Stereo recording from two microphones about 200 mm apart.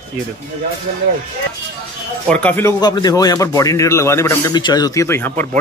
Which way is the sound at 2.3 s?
5° left (ahead or behind).